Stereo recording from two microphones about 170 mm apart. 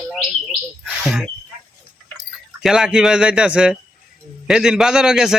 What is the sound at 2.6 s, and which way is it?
A man's voice, 5° right (ahead or behind).